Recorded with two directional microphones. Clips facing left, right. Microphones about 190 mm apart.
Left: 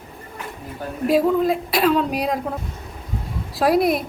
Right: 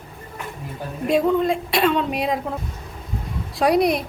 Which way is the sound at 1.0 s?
5° left (ahead or behind).